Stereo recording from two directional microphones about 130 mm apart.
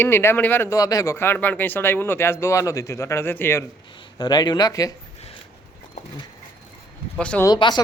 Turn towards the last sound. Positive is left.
turn(degrees=35)  # may be behind; listen again after turning